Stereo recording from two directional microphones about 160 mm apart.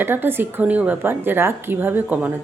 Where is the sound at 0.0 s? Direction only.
15° right (ahead or behind).